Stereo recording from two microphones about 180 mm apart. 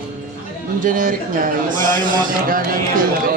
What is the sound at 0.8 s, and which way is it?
Speech, 50° right (ahead or behind).